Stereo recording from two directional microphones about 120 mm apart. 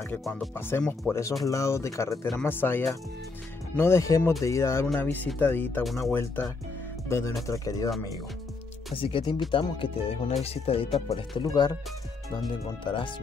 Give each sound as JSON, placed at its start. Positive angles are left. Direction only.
{"t": 0.6, "sound": "speech", "side_deg": 20}
{"t": 8.9, "sound": "speech", "side_deg": 45}
{"t": 11.4, "sound": "speech", "side_deg": 35}
{"t": 12.8, "sound": "speech", "side_deg": 45}